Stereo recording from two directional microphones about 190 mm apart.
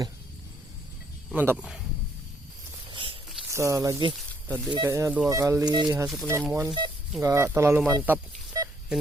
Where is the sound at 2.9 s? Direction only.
25° right (ahead or behind).